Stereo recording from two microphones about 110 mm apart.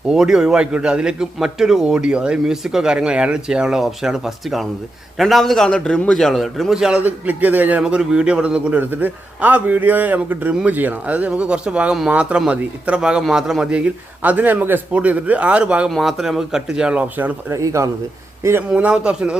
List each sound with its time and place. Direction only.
0.1 s a man's voice: 5° right (ahead or behind)
17.5 s speech: 30° right (ahead or behind)
18.7 s a man's voice: 10° right (ahead or behind)